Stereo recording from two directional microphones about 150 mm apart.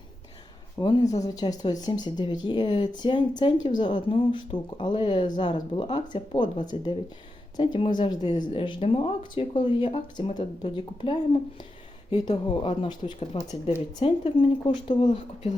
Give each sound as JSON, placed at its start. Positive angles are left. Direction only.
{"t": 0.8, "sound": "speech", "side_deg": 25}